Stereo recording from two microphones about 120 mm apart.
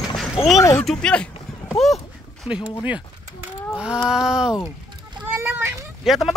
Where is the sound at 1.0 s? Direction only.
10° left (ahead or behind).